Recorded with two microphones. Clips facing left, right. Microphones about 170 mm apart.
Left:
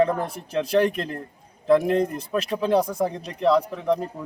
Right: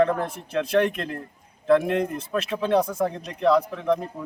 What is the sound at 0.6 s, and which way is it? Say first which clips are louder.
Speech: left 1 dB; 35° left (ahead or behind).